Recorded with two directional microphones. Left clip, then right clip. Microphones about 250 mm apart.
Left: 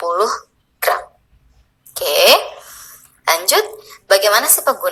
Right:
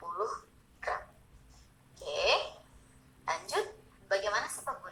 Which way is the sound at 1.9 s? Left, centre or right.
Left.